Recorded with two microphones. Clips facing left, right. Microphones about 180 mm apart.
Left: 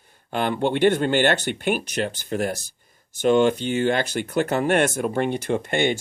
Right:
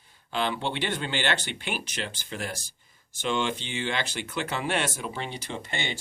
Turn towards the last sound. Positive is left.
turn(degrees=50)  # may be behind; listen again after turning